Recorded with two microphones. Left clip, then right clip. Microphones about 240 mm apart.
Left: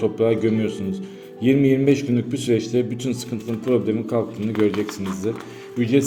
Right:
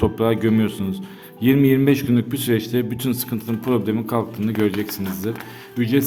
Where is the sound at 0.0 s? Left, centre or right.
Right.